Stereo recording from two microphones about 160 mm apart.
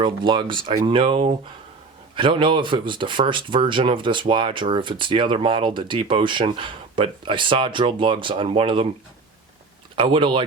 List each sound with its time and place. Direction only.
0.0 s speech: 30° right (ahead or behind)
9.9 s speech: 30° right (ahead or behind)